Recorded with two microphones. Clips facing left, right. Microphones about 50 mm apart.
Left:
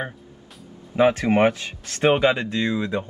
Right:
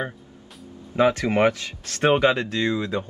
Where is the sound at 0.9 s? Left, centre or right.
Left.